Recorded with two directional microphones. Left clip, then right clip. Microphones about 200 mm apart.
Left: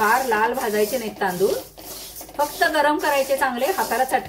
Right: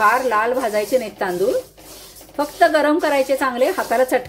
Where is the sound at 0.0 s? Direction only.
35° right (ahead or behind).